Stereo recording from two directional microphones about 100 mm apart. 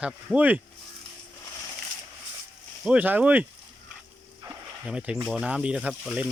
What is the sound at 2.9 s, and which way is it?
Speech, 15° right (ahead or behind).